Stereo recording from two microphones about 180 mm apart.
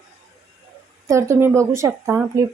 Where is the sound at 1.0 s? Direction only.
15° right (ahead or behind).